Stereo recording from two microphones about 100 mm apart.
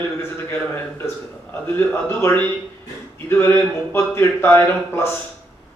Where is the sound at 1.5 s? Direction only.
25° left (ahead or behind).